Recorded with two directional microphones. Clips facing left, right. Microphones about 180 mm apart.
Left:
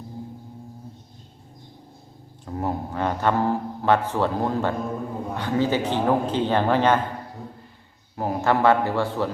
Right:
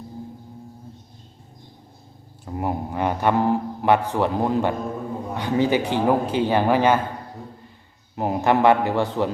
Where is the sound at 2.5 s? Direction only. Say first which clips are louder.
Right 1 dB; 10° right (ahead or behind).